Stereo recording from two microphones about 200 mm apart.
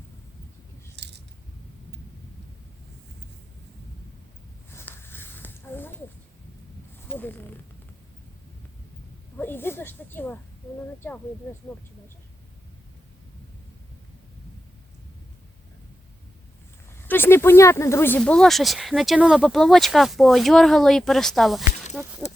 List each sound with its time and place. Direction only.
0.9 s scissors: 60° right (ahead or behind)
4.7 s a sound: 10° left (ahead or behind)
7.1 s zipper: 10° left (ahead or behind)
9.4 s speech: 10° left (ahead or behind)
16.9 s speech: 10° left (ahead or behind); by 22.1 s 10° right (ahead or behind)